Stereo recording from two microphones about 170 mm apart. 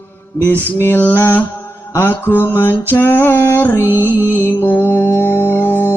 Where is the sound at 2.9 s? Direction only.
15° left (ahead or behind).